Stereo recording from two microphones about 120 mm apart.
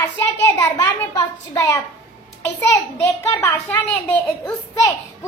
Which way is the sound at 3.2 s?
20° left (ahead or behind).